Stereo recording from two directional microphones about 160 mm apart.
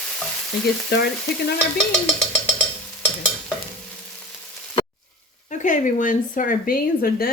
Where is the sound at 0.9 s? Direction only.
90° left.